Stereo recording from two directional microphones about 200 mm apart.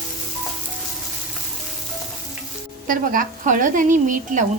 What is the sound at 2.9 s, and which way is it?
A woman's voice, 45° right (ahead or behind).